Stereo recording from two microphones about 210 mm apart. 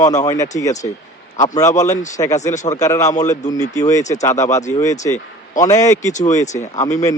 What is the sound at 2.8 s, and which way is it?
Speech, 15° left (ahead or behind).